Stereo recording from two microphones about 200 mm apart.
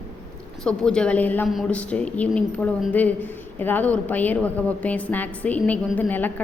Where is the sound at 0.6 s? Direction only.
5° left (ahead or behind).